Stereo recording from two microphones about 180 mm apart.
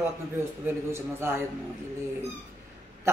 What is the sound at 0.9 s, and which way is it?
Speech, 15° right (ahead or behind).